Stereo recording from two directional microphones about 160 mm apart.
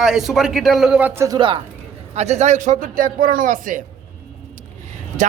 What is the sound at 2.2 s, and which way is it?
A man's voice, 45° right (ahead or behind).